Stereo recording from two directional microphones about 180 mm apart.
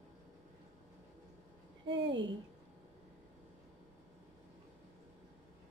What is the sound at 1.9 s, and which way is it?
Speech, 90° right.